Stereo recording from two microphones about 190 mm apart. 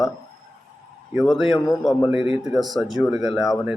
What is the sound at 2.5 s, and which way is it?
Speech, centre (ahead or behind).